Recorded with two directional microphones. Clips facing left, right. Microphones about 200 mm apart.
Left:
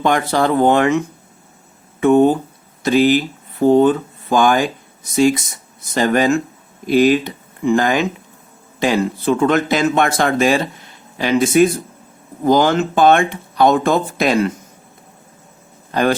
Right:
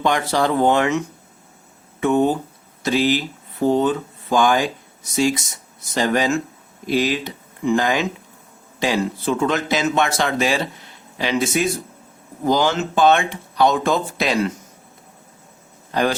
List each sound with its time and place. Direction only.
0.0 s speech: 50° left (ahead or behind)
15.9 s speech: 55° left (ahead or behind)